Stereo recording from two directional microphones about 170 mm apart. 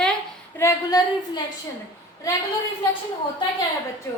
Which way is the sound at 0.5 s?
20° left (ahead or behind).